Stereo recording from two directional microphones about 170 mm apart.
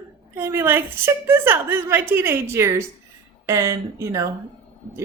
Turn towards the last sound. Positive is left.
turn(degrees=-15)  # may be behind; listen again after turning